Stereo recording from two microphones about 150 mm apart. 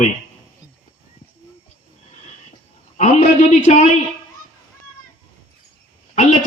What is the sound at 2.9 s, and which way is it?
Speech, 50° left (ahead or behind).